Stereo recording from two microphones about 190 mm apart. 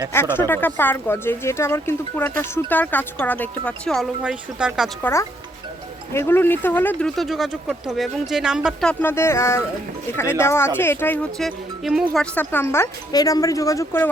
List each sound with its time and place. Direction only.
0.1 s speech: 10° left (ahead or behind); by 4.9 s 5° right (ahead or behind)
6.1 s speech: 10° left (ahead or behind)